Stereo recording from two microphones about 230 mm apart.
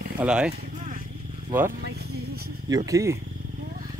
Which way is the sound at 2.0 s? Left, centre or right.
Right.